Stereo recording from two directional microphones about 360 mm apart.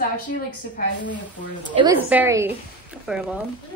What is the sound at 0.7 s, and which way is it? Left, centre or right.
Speech, left.